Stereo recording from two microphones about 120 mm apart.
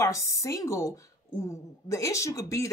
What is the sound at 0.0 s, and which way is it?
Speech, 25° left (ahead or behind).